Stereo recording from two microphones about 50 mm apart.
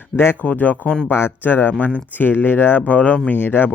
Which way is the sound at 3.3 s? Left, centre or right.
Left.